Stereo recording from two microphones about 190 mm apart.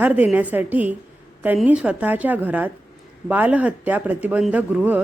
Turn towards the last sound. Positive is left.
turn(degrees=-10)  # may be behind; listen again after turning